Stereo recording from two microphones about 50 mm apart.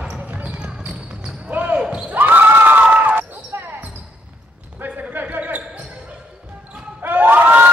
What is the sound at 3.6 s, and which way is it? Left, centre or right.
Basketball bounce, right.